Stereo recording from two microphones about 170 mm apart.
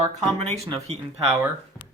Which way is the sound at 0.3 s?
40° right (ahead or behind).